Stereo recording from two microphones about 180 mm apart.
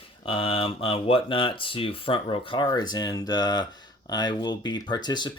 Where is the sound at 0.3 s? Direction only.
30° left (ahead or behind).